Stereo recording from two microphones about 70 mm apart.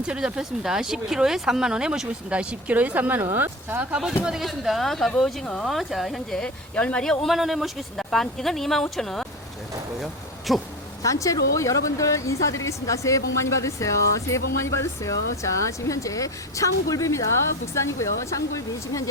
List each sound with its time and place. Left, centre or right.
0.1 s speech: centre; by 3.8 s right
3.9 s speech: centre
6.4 s speech: centre
11.0 s speech: left